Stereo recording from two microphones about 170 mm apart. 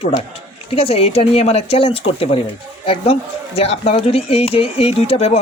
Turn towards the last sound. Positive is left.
turn(degrees=35)  # may be behind; listen again after turning